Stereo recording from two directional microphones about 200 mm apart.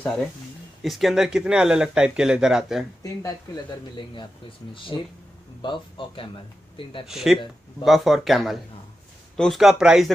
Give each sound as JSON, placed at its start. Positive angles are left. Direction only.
{"t": 0.0, "sound": "speech", "side_deg": 5}
{"t": 3.0, "sound": "speech", "side_deg": 20}
{"t": 7.1, "sound": "speech", "side_deg": 0}